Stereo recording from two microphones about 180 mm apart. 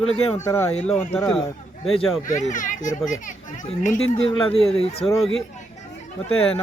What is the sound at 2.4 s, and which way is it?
Speech, 45° left (ahead or behind).